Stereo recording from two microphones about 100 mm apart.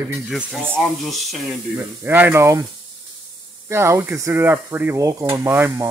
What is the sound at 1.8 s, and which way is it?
Speech, 20° right (ahead or behind).